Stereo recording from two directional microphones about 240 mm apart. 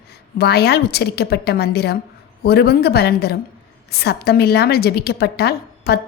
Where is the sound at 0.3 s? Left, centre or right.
Left.